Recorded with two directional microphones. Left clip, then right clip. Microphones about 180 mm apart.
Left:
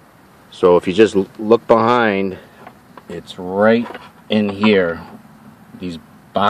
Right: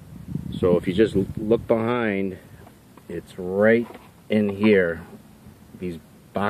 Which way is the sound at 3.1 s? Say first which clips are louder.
Left 4 dB; centre (ahead or behind).